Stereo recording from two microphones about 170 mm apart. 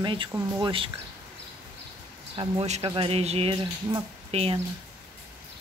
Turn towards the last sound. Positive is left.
turn(degrees=-35)  # may be behind; listen again after turning